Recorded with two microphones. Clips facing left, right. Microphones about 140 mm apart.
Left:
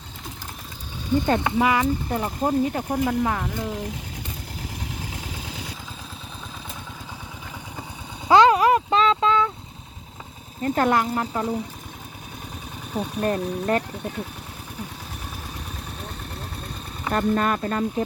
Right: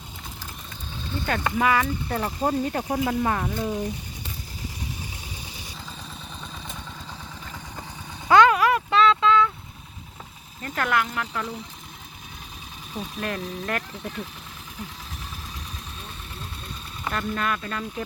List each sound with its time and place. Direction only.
1.1 s speech: 20° left (ahead or behind)
2.4 s speech: centre (ahead or behind)
8.3 s a sound: 30° left (ahead or behind)
10.6 s speech: 35° left (ahead or behind)
13.1 s speech: 35° left (ahead or behind)
13.9 s speech: 50° left (ahead or behind)
17.1 s speech: 40° left (ahead or behind)